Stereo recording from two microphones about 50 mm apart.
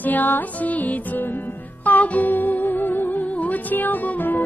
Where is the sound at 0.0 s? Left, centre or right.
Left.